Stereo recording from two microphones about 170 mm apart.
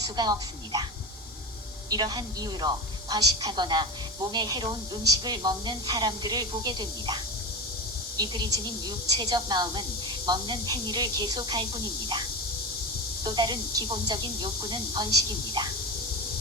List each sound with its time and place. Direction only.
0.0 s a woman's voice: 25° right (ahead or behind)
1.9 s a woman's voice: 25° right (ahead or behind)
8.2 s a woman's voice: 25° right (ahead or behind)
13.2 s a woman's voice: 25° right (ahead or behind)